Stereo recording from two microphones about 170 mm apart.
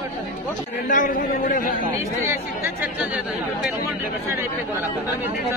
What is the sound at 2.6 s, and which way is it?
Speech, 5° right (ahead or behind).